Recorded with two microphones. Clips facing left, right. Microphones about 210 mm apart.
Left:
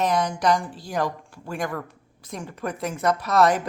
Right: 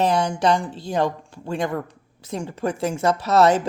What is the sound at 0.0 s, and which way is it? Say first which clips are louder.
Speech: right 3 dB; 30° right (ahead or behind).